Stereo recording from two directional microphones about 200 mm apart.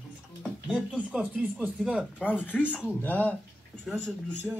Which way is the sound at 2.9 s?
10° left (ahead or behind).